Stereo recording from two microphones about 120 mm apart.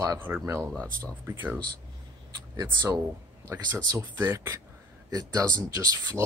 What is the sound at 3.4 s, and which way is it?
Speech, 20° right (ahead or behind).